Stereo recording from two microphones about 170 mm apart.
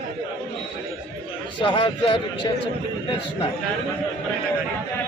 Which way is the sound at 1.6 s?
30° left (ahead or behind).